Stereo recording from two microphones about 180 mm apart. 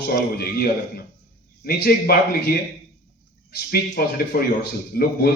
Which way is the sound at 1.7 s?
55° left (ahead or behind).